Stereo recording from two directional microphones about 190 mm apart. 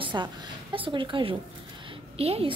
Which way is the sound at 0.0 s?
25° right (ahead or behind).